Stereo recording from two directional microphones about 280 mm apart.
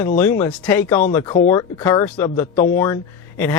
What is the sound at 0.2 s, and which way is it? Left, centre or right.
Speech, centre.